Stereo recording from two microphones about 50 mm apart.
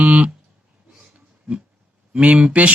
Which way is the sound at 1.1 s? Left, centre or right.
Right.